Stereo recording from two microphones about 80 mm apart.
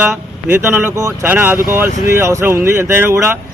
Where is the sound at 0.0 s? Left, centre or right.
Right.